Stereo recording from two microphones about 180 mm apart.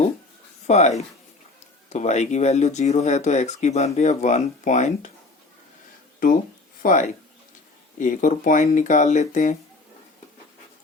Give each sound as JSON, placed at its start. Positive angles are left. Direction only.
{"t": 0.7, "sound": "speech", "side_deg": 40}
{"t": 6.8, "sound": "speech", "side_deg": 45}